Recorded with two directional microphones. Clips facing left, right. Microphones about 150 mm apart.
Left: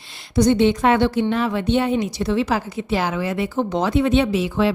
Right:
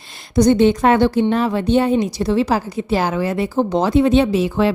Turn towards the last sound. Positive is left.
turn(degrees=-40)  # may be behind; listen again after turning